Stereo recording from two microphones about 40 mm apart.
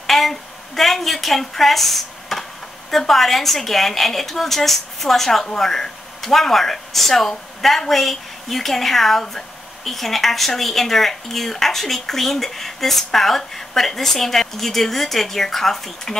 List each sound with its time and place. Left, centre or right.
0.0 s a woman's voice: centre